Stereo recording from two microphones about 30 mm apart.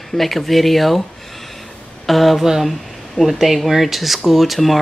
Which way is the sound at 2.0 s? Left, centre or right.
Centre.